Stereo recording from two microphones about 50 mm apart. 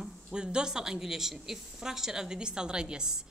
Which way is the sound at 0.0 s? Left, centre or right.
Centre.